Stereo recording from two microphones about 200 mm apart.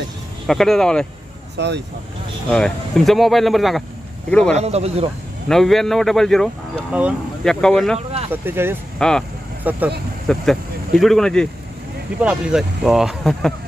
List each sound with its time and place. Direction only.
0.5 s speech: centre (ahead or behind)
1.6 s speech: 60° right (ahead or behind)
2.5 s speech: centre (ahead or behind)
4.6 s speech: 30° right (ahead or behind)
5.5 s speech: centre (ahead or behind)
8.3 s speech: 10° right (ahead or behind)
8.9 s speech: 5° left (ahead or behind)
9.6 s speech: 10° right (ahead or behind)